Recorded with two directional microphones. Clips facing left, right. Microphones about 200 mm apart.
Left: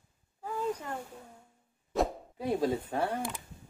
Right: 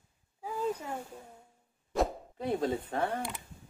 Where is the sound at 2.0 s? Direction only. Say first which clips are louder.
Even; 10° left (ahead or behind).